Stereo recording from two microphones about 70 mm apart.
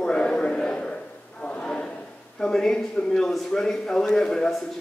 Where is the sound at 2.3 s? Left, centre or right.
Centre.